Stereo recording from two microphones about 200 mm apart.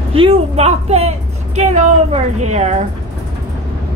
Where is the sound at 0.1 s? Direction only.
30° right (ahead or behind).